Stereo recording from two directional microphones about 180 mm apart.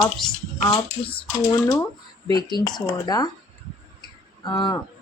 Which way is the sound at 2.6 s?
20° left (ahead or behind).